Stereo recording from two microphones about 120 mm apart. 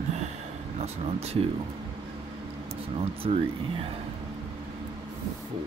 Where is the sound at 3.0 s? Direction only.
55° right (ahead or behind).